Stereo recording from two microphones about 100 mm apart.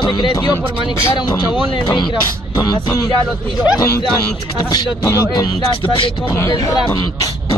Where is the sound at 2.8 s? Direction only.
35° left (ahead or behind).